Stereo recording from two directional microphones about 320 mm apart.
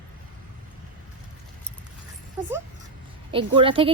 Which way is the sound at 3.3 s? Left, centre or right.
Centre.